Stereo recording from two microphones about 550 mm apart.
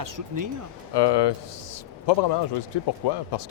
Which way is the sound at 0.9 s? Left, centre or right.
Left.